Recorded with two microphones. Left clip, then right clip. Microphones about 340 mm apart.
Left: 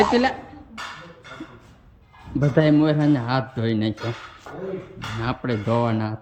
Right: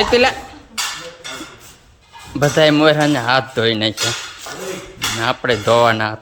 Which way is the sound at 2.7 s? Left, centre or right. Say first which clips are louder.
Right 6 dB; centre.